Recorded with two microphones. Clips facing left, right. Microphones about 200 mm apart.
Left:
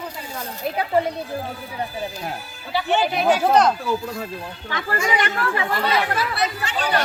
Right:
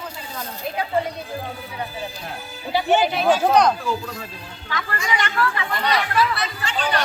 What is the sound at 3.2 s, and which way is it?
Speech, 10° left (ahead or behind).